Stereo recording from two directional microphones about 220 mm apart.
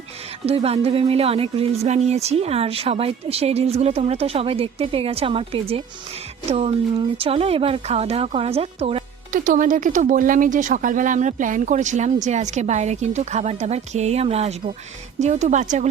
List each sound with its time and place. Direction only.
0.4 s speech: 25° right (ahead or behind)
9.3 s speech: 35° right (ahead or behind)